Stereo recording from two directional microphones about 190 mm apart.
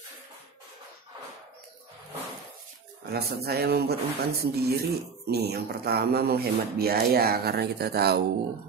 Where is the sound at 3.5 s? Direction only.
55° right (ahead or behind).